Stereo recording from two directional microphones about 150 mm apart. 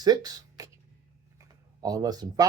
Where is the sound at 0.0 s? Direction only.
25° right (ahead or behind).